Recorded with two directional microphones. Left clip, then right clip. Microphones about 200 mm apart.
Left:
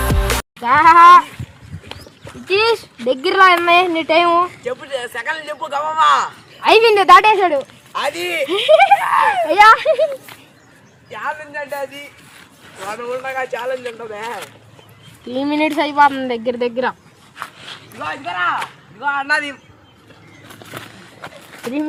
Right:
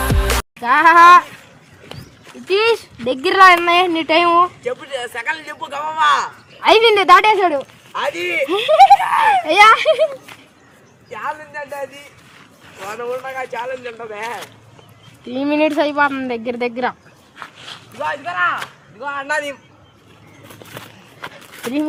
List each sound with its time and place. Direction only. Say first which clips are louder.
0.0 s music: even; centre (ahead or behind)
0.7 s speech: left 1 dB; 15° right (ahead or behind)
2.5 s speech: even; 20° right (ahead or behind)
4.6 s a man's voice: even; 5° right (ahead or behind)
6.6 s speech: even; 15° right (ahead or behind)
7.4 s a man's voice: left 1 dB; centre (ahead or behind)
9.0 s speech: right 1 dB; 15° right (ahead or behind)
9.5 s speech: left 1 dB; 35° right (ahead or behind)
10.0 s speech: even; 10° right (ahead or behind)
12.9 s speech: left 1 dB; 20° right (ahead or behind)
17.6 s speech: right 6 dB; 5° right (ahead or behind)
20.7 s walk: left 4 dB; 25° right (ahead or behind)